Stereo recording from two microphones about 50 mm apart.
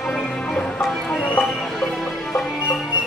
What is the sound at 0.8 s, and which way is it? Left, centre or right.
Music, centre.